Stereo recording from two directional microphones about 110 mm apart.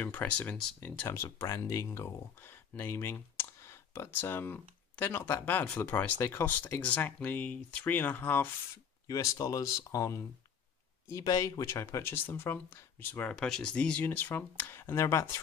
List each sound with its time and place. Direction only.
0.0 s speech: 15° left (ahead or behind)
9.0 s speech: 35° left (ahead or behind)
13.3 s speech: 5° left (ahead or behind); by 15.4 s 25° left (ahead or behind)